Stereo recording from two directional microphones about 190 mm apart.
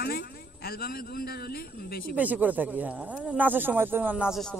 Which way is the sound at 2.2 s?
10° right (ahead or behind).